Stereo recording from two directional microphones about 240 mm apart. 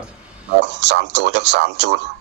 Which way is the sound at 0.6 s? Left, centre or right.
Right.